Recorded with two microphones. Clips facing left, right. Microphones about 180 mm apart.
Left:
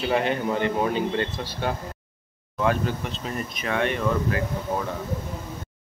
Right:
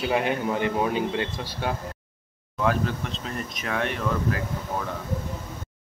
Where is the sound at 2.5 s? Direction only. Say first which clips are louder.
Left 1 dB; centre (ahead or behind).